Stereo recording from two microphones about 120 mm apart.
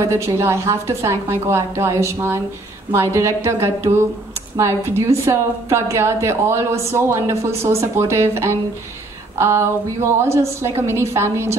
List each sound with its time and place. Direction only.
0.0 s a woman's voice: 25° right (ahead or behind)